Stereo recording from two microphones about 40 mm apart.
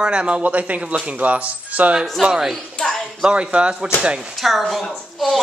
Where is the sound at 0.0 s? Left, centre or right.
Right.